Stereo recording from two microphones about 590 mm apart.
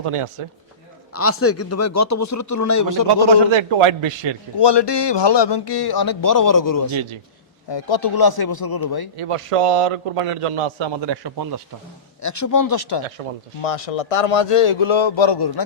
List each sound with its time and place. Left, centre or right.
0.0 s a man's voice: right
1.1 s speech: left
3.5 s a man's voice: right
4.5 s speech: left
7.7 s speech: left
9.1 s a man's voice: right
12.2 s speech: left
13.2 s speech: right
13.6 s a man's voice: left